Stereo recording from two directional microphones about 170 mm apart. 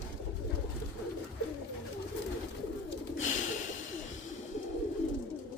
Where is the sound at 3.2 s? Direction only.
45° left (ahead or behind).